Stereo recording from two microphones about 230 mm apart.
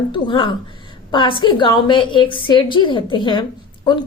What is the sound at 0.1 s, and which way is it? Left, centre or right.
A woman's voice, left.